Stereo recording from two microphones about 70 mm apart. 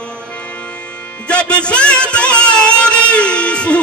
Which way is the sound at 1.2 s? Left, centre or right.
Centre.